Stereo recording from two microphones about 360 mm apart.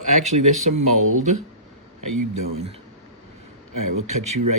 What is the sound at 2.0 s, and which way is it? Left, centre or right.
Speech, right.